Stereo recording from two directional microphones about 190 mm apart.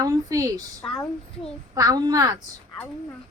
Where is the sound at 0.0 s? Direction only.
20° right (ahead or behind).